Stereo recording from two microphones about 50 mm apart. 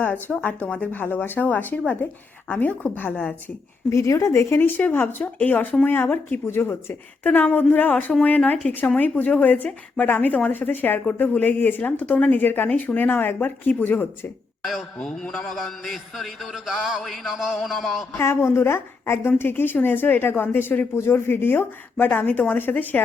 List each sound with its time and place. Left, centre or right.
0.1 s a woman's voice: left
1.1 s speech: left
3.1 s a woman's voice: left
3.8 s speech: left
5.2 s speech: left
7.4 s a woman's voice: left
12.6 s speech: left
14.6 s speech: centre
15.0 s a man's voice: centre
18.2 s a woman's voice: left
21.0 s speech: left